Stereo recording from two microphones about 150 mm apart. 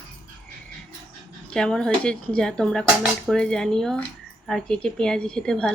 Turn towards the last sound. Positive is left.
turn(degrees=5)  # may be behind; listen again after turning